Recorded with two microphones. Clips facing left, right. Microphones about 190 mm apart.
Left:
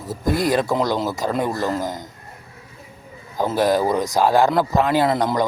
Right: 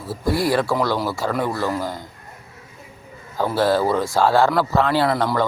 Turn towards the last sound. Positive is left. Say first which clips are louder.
# left 1 dB
turn(degrees=20)  # may be behind; listen again after turning